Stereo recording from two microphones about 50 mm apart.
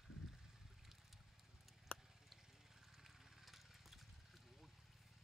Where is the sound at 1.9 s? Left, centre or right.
Left.